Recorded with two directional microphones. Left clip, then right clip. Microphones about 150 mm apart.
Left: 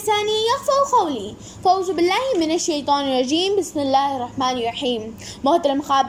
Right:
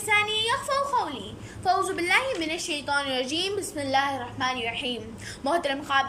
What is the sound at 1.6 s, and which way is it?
A woman's voice, 25° left (ahead or behind).